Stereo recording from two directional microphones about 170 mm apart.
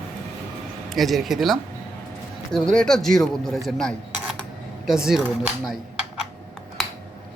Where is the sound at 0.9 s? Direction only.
Centre (ahead or behind).